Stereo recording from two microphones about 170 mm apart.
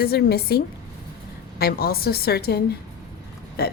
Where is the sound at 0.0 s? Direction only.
65° left (ahead or behind).